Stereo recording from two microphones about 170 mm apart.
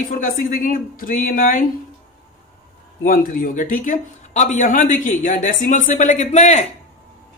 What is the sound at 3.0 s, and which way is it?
Speech, 55° left (ahead or behind).